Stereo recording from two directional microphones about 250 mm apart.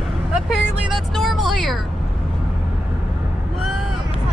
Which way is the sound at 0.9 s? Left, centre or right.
Centre.